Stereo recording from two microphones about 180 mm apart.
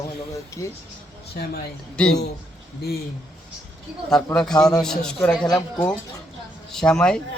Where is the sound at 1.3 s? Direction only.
60° left (ahead or behind).